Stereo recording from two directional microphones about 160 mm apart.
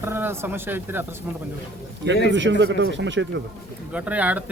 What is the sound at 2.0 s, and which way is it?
Speech, 90° right.